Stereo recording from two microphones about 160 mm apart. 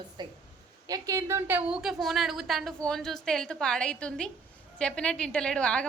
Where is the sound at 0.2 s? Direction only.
25° right (ahead or behind).